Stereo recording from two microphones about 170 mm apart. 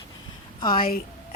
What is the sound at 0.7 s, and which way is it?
Speech, 60° left (ahead or behind).